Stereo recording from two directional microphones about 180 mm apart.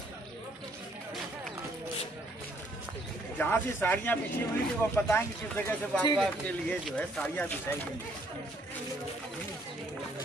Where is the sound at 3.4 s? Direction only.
10° left (ahead or behind).